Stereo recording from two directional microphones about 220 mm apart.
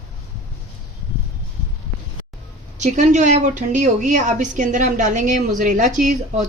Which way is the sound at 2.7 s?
35° right (ahead or behind).